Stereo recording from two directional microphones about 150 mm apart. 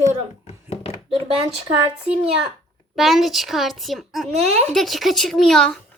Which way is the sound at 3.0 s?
Centre (ahead or behind).